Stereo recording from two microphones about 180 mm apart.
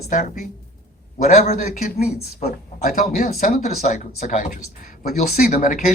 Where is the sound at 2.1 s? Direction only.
55° left (ahead or behind).